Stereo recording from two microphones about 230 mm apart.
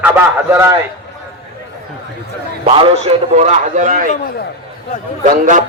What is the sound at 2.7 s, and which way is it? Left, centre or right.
A man's voice, right.